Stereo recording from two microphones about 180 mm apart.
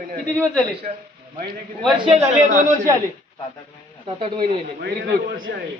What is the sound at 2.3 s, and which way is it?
Speech, 45° right (ahead or behind).